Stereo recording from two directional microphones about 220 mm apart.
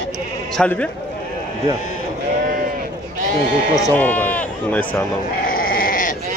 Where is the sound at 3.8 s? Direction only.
5° left (ahead or behind).